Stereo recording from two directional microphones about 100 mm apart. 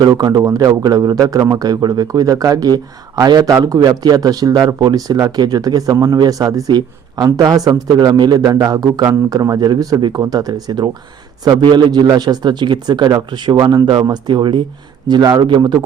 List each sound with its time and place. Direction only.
0.0 s a man's voice: 40° right (ahead or behind)